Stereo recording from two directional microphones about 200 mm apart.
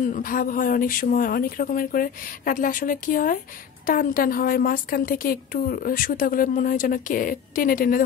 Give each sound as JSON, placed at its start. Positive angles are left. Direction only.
{"t": 0.0, "sound": "a woman's voice", "side_deg": 40}